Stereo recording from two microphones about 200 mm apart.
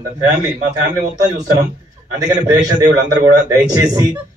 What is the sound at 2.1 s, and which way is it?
A man's voice, 20° right (ahead or behind).